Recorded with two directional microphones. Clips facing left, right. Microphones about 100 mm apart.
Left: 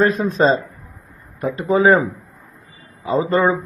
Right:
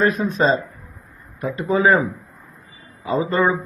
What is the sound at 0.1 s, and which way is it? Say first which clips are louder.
A man's voice: left 2 dB; 30° left (ahead or behind).